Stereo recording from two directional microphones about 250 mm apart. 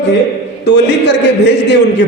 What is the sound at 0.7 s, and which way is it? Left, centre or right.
A man's voice, left.